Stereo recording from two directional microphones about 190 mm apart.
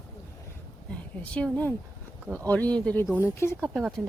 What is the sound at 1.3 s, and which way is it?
Speech, 5° left (ahead or behind).